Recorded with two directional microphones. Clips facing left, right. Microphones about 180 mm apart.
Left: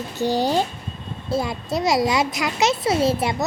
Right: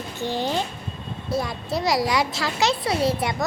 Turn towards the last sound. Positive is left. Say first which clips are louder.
# left 3 dB
turn(degrees=25)  # may be behind; listen again after turning